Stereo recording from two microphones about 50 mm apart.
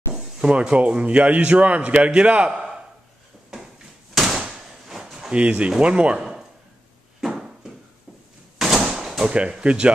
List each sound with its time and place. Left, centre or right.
0.1 s speech: centre
4.1 s door: centre
4.4 s drawer open or close: centre
5.3 s speech: right
7.2 s a sound: centre
8.5 s a sound: centre
9.3 s speech: right